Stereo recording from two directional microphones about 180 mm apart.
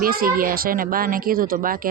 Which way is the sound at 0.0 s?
55° right (ahead or behind).